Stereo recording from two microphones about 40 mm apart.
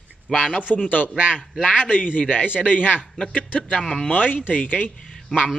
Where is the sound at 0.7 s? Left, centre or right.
Left.